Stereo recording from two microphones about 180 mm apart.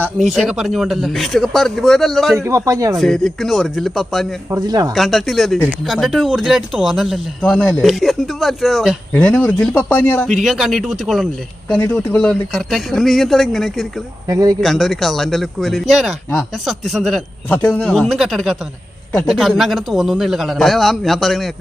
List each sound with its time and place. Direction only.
0.3 s speech: 5° right (ahead or behind)
2.4 s speech: 15° right (ahead or behind)
3.0 s speech: centre (ahead or behind)
4.4 s speech: 20° right (ahead or behind)
4.9 s speech: centre (ahead or behind)
10.2 s speech: centre (ahead or behind)
11.7 s speech: 10° left (ahead or behind)
14.3 s speech: 20° right (ahead or behind)
14.6 s speech: centre (ahead or behind)